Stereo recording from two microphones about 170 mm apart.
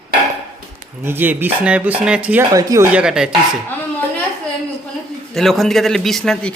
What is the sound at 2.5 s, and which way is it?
Speech, 20° right (ahead or behind).